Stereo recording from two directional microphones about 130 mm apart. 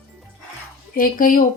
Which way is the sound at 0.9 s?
90° left.